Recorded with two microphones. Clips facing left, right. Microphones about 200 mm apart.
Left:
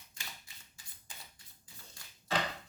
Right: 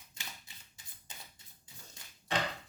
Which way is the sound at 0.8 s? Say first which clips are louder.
Even; 20° right (ahead or behind).